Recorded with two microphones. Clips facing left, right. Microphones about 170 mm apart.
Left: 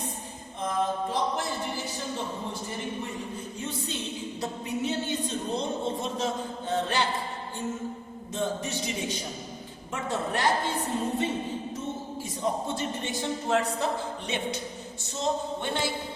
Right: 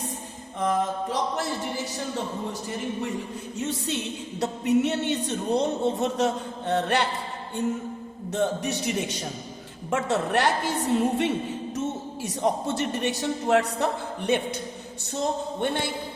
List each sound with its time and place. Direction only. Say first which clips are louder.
0.6 s music: right 3 dB; 70° right (ahead or behind)
4.4 s speech: right 11 dB; 70° right (ahead or behind)
8.3 s speech: right 5 dB; 70° right (ahead or behind)
12.4 s speech: right 4 dB; 75° right (ahead or behind); by 14.6 s 55° right (ahead or behind)
15.6 s a man's voice: right 5 dB; 55° right (ahead or behind)